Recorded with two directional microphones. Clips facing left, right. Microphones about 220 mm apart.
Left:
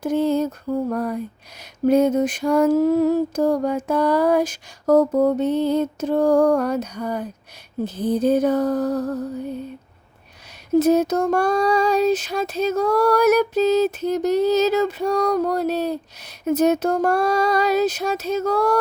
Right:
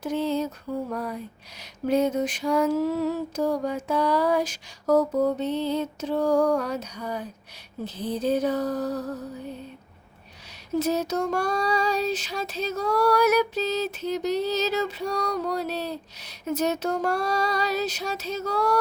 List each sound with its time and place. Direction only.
0.0 s child singing: 50° left (ahead or behind)
10.8 s child singing: 50° left (ahead or behind)